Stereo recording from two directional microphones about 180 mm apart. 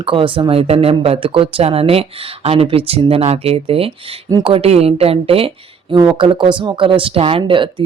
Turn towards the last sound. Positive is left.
turn(degrees=-30)  # may be behind; listen again after turning